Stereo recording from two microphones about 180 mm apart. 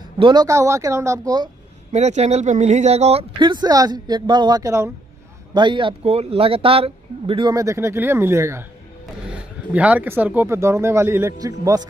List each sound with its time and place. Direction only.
0.2 s speech: 25° right (ahead or behind)
1.9 s speech: 40° right (ahead or behind); by 11.8 s 20° right (ahead or behind)